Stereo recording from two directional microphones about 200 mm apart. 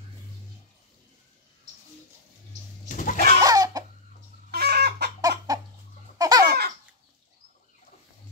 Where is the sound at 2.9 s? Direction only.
40° left (ahead or behind).